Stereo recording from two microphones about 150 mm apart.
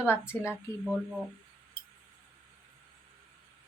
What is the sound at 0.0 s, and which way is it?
Speech, 15° left (ahead or behind).